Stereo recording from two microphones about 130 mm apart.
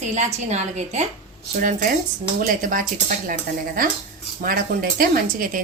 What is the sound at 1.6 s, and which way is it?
Speech, 90° right.